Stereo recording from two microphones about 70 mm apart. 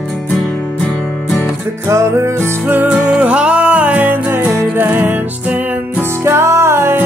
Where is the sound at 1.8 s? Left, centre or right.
Right.